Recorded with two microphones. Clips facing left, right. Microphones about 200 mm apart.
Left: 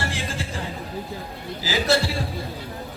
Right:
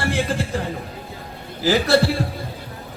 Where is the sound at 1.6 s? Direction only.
55° right (ahead or behind).